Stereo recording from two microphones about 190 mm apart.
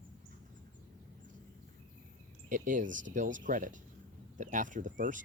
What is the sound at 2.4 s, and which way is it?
Speech, 45° right (ahead or behind).